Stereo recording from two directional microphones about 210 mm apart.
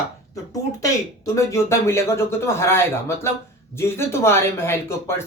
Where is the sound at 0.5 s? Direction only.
15° left (ahead or behind).